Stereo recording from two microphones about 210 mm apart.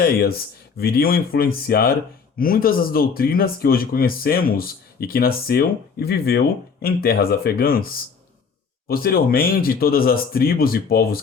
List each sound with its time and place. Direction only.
0.0 s speech: 45° left (ahead or behind)